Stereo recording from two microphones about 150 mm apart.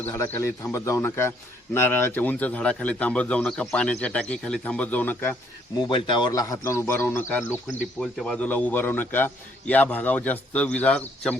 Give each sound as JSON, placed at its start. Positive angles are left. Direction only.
{"t": 0.0, "sound": "a man's voice", "side_deg": 15}
{"t": 5.9, "sound": "a man's voice", "side_deg": 30}